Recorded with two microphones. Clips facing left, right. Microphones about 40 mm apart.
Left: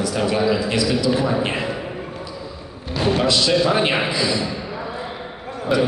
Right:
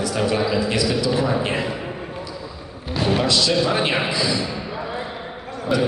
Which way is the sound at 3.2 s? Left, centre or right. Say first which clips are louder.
Left 3 dB; centre.